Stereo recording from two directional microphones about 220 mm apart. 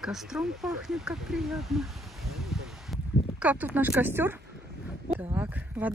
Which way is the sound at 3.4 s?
5° right (ahead or behind).